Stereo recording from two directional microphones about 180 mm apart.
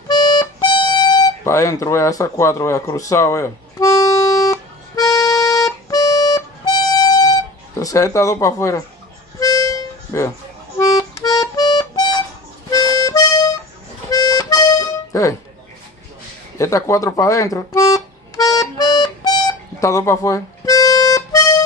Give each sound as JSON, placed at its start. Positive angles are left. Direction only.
{"t": 0.1, "sound": "music", "side_deg": 25}
{"t": 7.8, "sound": "speech", "side_deg": 20}
{"t": 9.4, "sound": "harmonica", "side_deg": 20}
{"t": 11.0, "sound": "music", "side_deg": 20}
{"t": 12.7, "sound": "accordion", "side_deg": 20}
{"t": 16.5, "sound": "music", "side_deg": 15}